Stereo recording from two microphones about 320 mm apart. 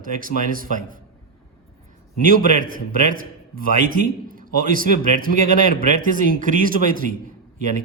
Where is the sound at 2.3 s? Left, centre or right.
Right.